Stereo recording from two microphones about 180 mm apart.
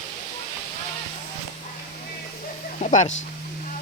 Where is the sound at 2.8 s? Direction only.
40° left (ahead or behind).